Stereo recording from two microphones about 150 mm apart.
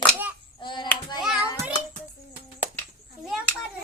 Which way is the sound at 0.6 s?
30° left (ahead or behind).